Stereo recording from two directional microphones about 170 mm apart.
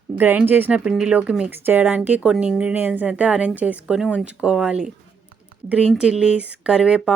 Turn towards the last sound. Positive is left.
turn(degrees=-5)  # may be behind; listen again after turning